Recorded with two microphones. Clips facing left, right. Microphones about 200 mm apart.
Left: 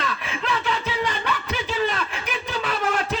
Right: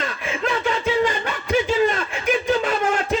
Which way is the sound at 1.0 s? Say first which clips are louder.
Right 3 dB; 45° right (ahead or behind).